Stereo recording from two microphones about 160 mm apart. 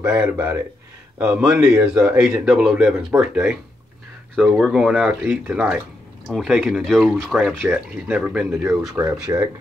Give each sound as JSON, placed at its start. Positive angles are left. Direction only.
{"t": 0.0, "sound": "a man's voice", "side_deg": -10}
{"t": 9.3, "sound": "speech", "side_deg": -25}